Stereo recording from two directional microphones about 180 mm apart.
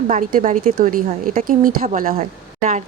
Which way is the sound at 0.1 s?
45° right (ahead or behind).